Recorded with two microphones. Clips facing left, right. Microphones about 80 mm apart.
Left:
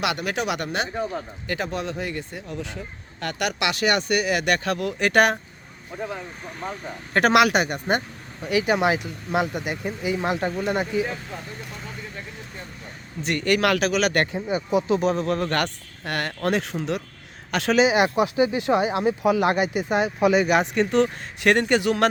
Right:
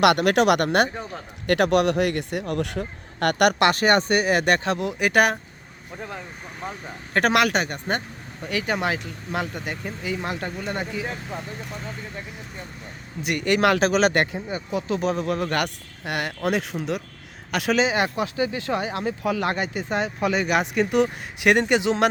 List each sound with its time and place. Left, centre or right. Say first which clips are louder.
0.0 s speech: right 8 dB; right
1.5 s speech: right 10 dB; right; by 11.0 s centre
13.2 s speech: right 1 dB; centre; by 14.2 s right
14.3 s speech: left 5 dB; centre
17.8 s speech: left 4 dB; centre
20.9 s speech: even; centre